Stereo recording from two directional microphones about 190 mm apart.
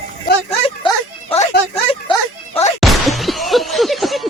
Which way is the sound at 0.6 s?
30° left (ahead or behind).